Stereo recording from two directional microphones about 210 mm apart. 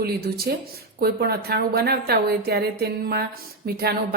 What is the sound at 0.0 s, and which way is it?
A woman's voice, 45° right (ahead or behind).